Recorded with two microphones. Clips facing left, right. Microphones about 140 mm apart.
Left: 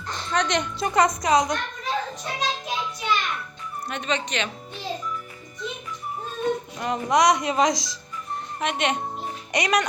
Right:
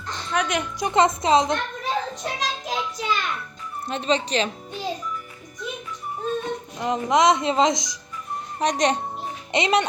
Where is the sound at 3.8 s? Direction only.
30° right (ahead or behind).